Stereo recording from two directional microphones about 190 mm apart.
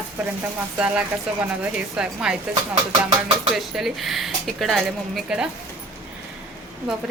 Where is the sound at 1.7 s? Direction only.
5° right (ahead or behind).